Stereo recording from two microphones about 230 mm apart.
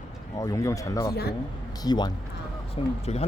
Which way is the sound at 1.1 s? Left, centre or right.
Left.